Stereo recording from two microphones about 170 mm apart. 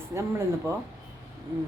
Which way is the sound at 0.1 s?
15° right (ahead or behind).